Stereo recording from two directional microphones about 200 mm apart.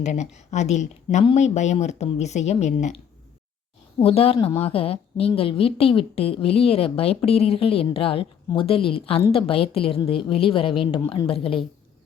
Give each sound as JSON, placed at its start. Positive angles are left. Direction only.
{"t": 0.0, "sound": "a woman's voice", "side_deg": 35}